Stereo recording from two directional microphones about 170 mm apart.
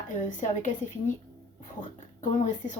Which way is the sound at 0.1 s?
45° left (ahead or behind).